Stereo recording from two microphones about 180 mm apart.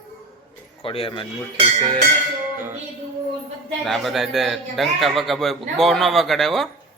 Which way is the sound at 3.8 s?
Centre (ahead or behind).